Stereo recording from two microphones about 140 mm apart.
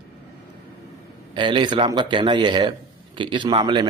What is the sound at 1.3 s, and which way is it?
A man's voice, 35° right (ahead or behind).